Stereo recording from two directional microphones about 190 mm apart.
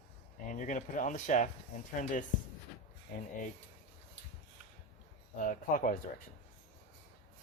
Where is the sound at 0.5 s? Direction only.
40° left (ahead or behind).